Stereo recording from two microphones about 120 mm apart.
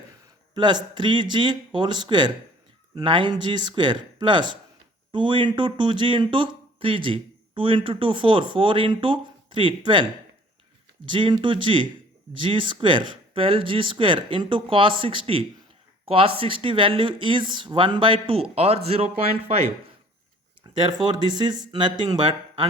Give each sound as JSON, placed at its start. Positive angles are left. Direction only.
{"t": 0.5, "sound": "speech", "side_deg": -40}
{"t": 20.7, "sound": "speech", "side_deg": -45}